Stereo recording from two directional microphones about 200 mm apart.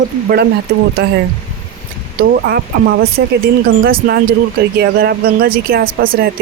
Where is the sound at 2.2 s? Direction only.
50° right (ahead or behind).